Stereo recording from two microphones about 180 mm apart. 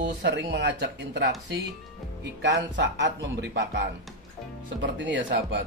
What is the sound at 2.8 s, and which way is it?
Speech, 75° right (ahead or behind).